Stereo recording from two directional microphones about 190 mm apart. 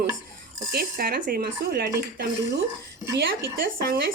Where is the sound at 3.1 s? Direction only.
55° right (ahead or behind).